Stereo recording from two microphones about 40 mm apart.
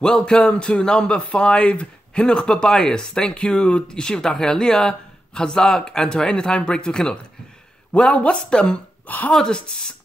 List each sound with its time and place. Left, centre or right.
0.0 s speech: left
8.4 s speech: left
9.0 s a woman's voice: left
9.3 s speech: centre